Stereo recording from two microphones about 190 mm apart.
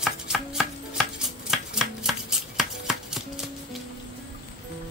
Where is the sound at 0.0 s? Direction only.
5° right (ahead or behind).